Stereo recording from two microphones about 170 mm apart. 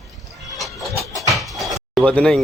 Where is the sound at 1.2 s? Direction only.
Centre (ahead or behind).